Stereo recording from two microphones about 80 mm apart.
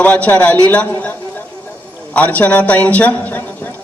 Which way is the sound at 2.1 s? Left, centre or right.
Centre.